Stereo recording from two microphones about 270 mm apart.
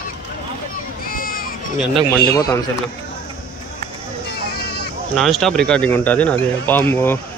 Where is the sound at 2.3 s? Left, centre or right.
Centre.